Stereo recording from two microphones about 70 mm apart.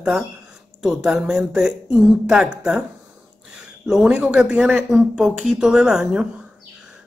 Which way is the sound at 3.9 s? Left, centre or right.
Centre.